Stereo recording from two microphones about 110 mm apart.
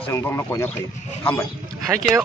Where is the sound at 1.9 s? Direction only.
30° right (ahead or behind).